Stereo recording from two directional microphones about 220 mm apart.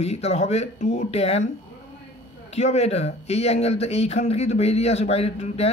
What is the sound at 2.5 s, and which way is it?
Speech, 30° left (ahead or behind).